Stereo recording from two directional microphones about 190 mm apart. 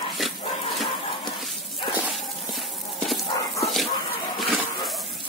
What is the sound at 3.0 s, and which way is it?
Dog, centre (ahead or behind).